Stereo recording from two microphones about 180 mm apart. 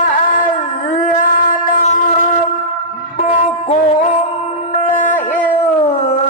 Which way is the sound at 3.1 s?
45° left (ahead or behind).